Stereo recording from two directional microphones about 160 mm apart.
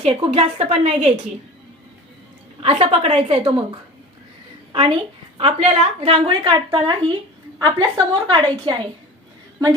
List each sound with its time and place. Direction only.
0.0 s a woman's voice: 40° right (ahead or behind)
2.6 s a woman's voice: 35° right (ahead or behind)
4.7 s a woman's voice: 30° right (ahead or behind)